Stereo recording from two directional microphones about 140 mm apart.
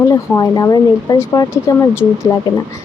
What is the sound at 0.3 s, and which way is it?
Speech, 25° left (ahead or behind).